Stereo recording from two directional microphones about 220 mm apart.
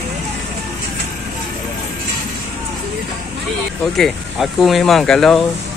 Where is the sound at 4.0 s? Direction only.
Centre (ahead or behind).